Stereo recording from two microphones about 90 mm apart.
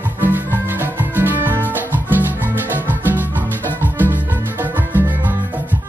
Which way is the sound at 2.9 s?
20° right (ahead or behind).